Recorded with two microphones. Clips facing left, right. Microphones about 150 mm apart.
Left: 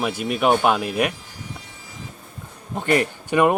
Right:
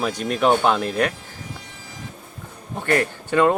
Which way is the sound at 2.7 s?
20° left (ahead or behind).